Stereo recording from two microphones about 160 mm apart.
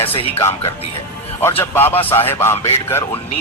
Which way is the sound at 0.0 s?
35° left (ahead or behind).